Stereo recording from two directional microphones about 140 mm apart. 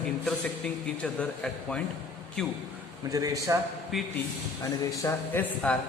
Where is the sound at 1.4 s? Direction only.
5° left (ahead or behind).